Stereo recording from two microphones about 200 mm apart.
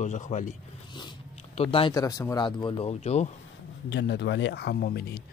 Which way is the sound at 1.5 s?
25° left (ahead or behind).